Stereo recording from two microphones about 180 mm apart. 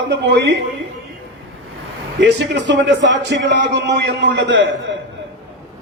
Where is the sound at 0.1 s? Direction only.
70° right (ahead or behind).